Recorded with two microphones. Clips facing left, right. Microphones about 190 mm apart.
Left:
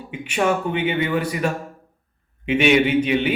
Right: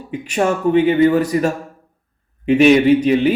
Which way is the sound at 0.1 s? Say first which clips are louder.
Right 3 dB; 40° right (ahead or behind).